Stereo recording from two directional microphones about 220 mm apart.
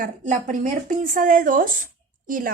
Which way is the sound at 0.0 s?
35° right (ahead or behind).